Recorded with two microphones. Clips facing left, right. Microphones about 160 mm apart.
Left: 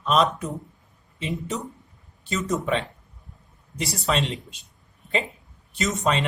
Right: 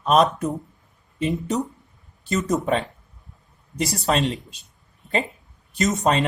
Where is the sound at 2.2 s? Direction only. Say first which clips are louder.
Right 3 dB; 40° right (ahead or behind).